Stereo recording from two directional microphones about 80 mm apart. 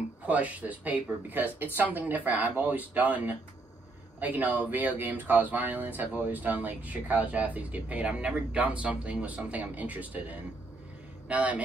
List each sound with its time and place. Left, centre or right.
0.3 s a man's voice: centre